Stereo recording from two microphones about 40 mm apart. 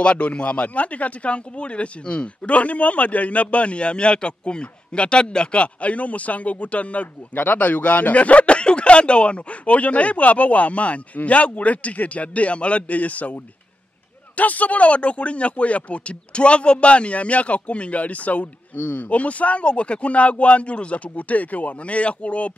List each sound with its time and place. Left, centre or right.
0.0 s speech: left